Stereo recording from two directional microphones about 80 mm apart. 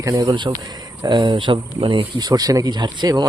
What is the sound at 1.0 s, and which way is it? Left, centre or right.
A man's voice, right.